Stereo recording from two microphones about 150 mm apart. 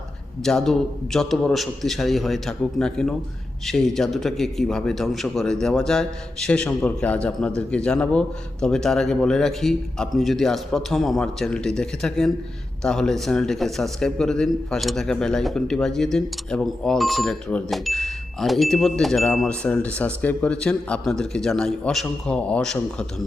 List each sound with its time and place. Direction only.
0.4 s speech: 5° left (ahead or behind)